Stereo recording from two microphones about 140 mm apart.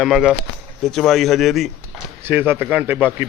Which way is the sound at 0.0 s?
5° right (ahead or behind).